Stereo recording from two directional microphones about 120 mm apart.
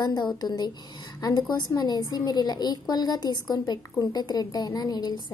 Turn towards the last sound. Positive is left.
turn(degrees=35)  # may be behind; listen again after turning